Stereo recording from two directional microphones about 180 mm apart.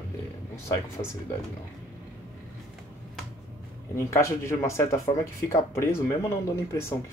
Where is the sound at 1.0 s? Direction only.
35° left (ahead or behind).